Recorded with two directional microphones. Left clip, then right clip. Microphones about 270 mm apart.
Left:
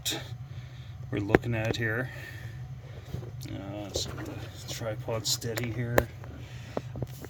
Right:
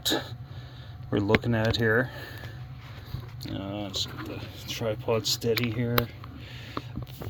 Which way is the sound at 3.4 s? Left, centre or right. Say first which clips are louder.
Right 5 dB; right.